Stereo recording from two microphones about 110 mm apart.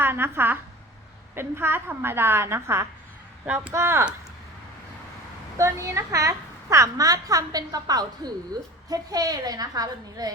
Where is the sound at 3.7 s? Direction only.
25° right (ahead or behind).